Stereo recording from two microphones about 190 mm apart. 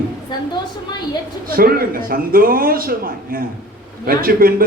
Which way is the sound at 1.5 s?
50° right (ahead or behind).